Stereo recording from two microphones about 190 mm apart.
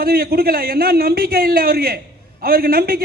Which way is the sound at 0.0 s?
55° right (ahead or behind).